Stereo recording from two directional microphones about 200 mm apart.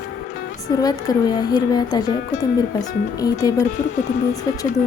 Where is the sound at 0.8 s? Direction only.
20° left (ahead or behind).